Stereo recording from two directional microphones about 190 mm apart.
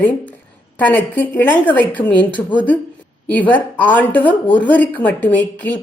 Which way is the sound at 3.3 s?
10° left (ahead or behind).